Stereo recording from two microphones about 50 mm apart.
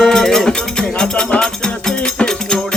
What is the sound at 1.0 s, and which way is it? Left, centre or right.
Music, centre.